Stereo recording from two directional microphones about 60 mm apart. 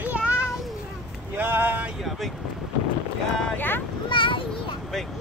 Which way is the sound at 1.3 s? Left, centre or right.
Right.